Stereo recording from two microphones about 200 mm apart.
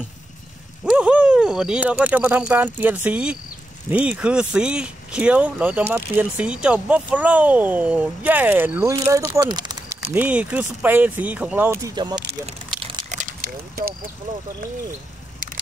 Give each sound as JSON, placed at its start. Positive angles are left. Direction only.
{"t": 0.8, "sound": "speech", "side_deg": -5}
{"t": 10.0, "sound": "speech", "side_deg": -10}
{"t": 12.8, "sound": "a sound", "side_deg": -30}